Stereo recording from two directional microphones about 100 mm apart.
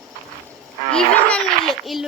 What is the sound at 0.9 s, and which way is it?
A child's voice, 10° left (ahead or behind).